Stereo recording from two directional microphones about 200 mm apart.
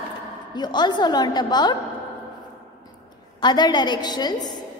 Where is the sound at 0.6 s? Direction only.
20° left (ahead or behind).